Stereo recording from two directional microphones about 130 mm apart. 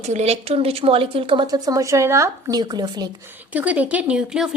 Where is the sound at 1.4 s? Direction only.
30° right (ahead or behind).